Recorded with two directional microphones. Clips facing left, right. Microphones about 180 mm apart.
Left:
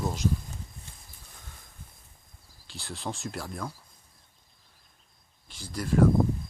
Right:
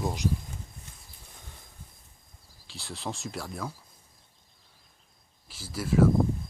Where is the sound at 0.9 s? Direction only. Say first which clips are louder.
Left 1 dB; 30° left (ahead or behind).